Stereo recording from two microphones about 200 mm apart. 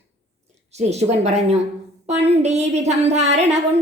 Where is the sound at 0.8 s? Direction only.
35° right (ahead or behind).